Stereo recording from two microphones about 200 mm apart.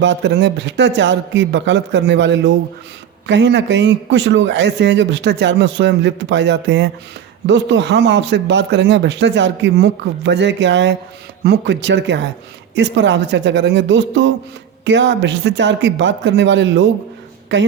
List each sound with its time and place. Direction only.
0.0 s speech: 60° right (ahead or behind)